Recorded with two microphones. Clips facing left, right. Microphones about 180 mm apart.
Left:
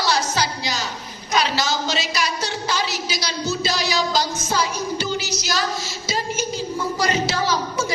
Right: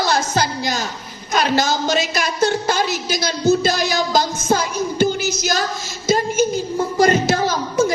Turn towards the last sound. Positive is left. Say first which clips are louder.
# right 5 dB
turn(degrees=-50)  # may be behind; listen again after turning